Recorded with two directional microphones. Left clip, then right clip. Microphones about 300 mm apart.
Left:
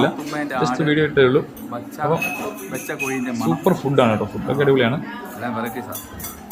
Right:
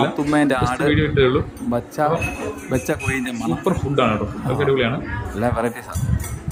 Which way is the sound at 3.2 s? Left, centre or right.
Centre.